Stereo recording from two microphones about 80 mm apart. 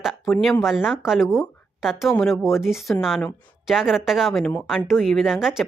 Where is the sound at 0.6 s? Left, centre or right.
Centre.